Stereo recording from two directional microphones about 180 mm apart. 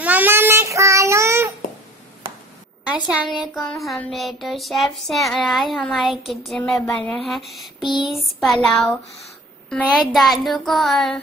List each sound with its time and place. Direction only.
0.0 s child singing: 10° right (ahead or behind)
2.8 s a woman's voice: 5° right (ahead or behind)
3.3 s a sound: centre (ahead or behind)